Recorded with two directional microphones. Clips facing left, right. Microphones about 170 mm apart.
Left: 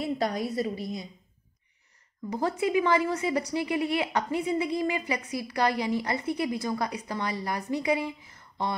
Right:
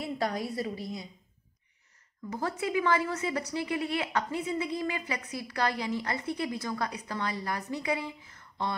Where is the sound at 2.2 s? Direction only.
15° left (ahead or behind).